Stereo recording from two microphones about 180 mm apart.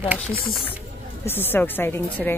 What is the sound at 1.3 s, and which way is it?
Speech, 10° left (ahead or behind).